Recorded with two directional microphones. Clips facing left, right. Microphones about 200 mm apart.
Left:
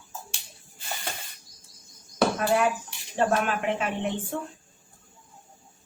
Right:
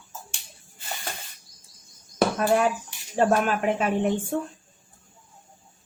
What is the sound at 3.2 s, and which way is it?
Speech, 40° right (ahead or behind).